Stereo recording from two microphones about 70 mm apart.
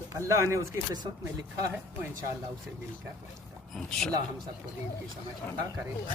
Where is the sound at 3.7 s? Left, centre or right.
Centre.